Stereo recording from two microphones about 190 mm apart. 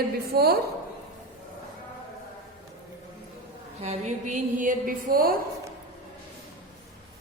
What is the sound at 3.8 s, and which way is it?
A woman's voice, 35° right (ahead or behind).